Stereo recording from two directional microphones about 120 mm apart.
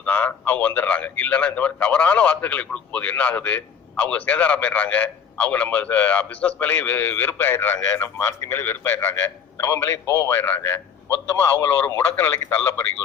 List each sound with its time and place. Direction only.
0.0 s a man's voice: 15° left (ahead or behind)